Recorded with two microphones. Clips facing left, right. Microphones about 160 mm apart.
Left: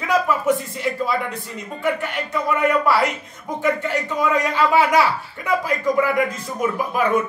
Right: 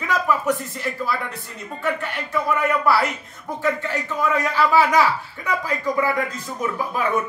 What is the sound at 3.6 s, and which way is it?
A man's voice, 15° left (ahead or behind).